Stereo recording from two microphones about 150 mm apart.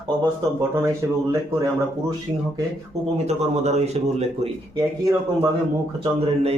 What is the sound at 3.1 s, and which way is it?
Speech, 45° right (ahead or behind).